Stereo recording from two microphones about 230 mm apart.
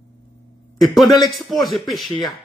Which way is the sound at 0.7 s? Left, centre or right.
Centre.